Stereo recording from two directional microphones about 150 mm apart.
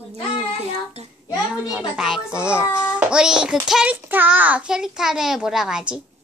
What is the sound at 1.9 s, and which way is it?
A child's voice, 5° right (ahead or behind).